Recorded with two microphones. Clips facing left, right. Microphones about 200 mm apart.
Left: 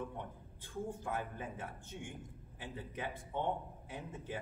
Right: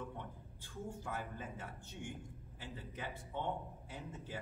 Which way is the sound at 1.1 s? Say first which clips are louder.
Left 3 dB; 15° left (ahead or behind).